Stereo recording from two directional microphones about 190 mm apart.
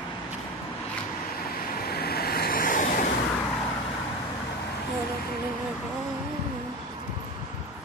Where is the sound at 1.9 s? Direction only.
55° left (ahead or behind).